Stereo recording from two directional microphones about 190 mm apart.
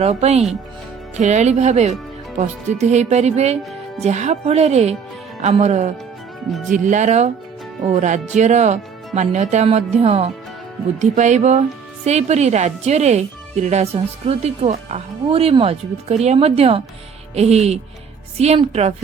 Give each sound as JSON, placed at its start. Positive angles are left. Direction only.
{"t": 0.0, "sound": "speech", "side_deg": -35}